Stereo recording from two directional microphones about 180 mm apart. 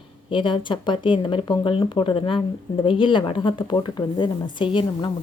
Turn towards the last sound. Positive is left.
turn(degrees=25)  # may be behind; listen again after turning